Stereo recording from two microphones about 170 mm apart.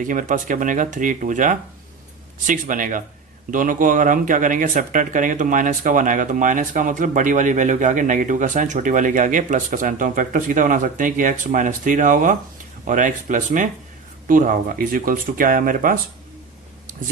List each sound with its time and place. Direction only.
0.0 s speech: 50° right (ahead or behind)